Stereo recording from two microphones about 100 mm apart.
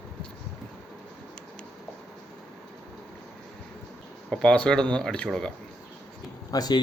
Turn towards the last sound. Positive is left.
turn(degrees=40)  # may be behind; listen again after turning